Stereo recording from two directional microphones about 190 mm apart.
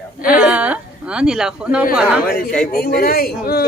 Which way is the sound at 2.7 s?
55° left (ahead or behind).